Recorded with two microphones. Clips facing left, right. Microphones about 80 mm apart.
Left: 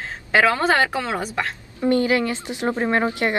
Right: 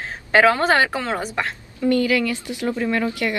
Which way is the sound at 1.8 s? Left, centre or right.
Left.